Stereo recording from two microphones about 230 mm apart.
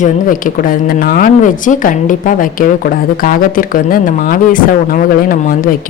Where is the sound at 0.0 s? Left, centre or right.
Left.